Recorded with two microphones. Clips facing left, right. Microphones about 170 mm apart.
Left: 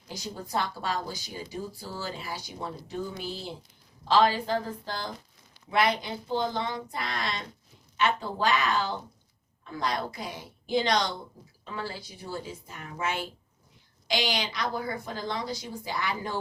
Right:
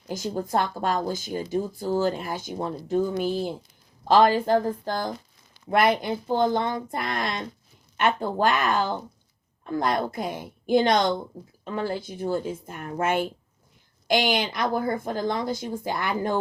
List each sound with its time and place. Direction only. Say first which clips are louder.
0.1 s a woman's voice: right 7 dB; 50° right (ahead or behind)